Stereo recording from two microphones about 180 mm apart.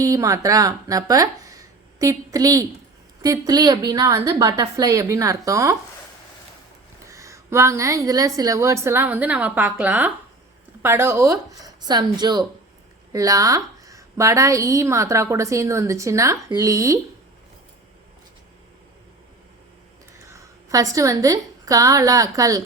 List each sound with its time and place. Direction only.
0.0 s a woman's voice: 20° right (ahead or behind)
7.1 s a woman's voice: 15° right (ahead or behind)
20.1 s a woman's voice: 15° right (ahead or behind)